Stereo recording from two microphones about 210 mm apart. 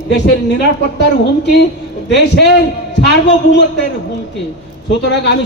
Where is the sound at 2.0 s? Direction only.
55° left (ahead or behind).